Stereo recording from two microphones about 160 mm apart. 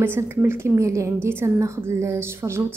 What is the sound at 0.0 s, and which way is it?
A woman's voice, 15° right (ahead or behind).